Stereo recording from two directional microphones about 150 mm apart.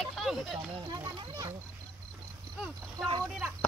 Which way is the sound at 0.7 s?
25° right (ahead or behind).